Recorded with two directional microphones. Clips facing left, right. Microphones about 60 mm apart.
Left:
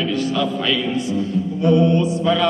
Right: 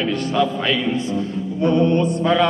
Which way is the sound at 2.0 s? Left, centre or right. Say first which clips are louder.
Even; right.